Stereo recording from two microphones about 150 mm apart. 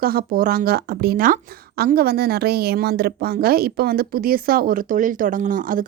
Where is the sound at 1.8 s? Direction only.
90° right.